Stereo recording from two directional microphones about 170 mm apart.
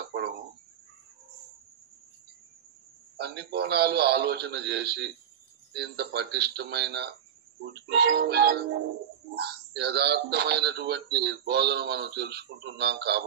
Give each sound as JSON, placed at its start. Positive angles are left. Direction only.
{"t": 3.2, "sound": "speech", "side_deg": -80}